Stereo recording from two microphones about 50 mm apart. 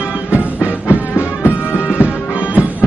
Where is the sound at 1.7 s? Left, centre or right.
Left.